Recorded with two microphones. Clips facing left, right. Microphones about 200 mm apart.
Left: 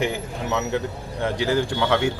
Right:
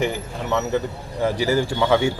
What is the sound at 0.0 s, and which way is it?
Speech, centre (ahead or behind).